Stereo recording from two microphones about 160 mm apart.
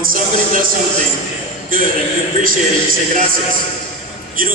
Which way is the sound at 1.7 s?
60° right (ahead or behind).